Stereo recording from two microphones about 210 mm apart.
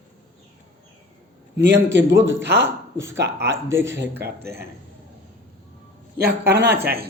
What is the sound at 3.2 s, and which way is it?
Speech, 55° right (ahead or behind).